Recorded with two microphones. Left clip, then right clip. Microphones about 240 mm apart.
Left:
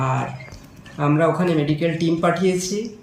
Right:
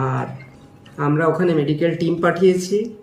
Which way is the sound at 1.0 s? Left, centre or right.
Centre.